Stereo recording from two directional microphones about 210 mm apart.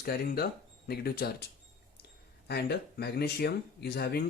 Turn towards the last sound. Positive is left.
turn(degrees=50)  # may be behind; listen again after turning